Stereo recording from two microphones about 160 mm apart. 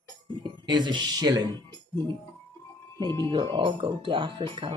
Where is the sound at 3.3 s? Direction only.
30° right (ahead or behind).